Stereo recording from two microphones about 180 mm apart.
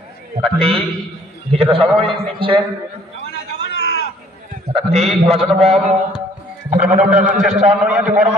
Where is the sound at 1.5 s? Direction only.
30° right (ahead or behind).